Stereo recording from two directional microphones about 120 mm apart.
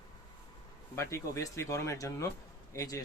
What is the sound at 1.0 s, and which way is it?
Speech, 25° left (ahead or behind).